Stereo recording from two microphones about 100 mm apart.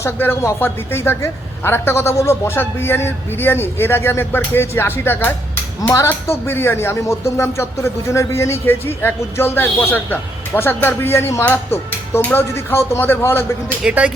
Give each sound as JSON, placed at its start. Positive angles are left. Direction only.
{"t": 0.0, "sound": "speech", "side_deg": 25}
{"t": 13.8, "sound": "speech", "side_deg": -10}